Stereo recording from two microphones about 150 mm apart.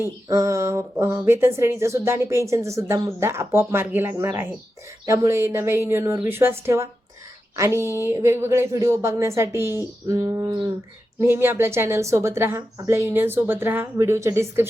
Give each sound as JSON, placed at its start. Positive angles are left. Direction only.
{"t": 0.0, "sound": "a woman's voice", "side_deg": -20}